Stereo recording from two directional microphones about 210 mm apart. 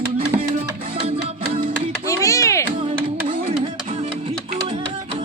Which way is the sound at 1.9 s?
15° left (ahead or behind).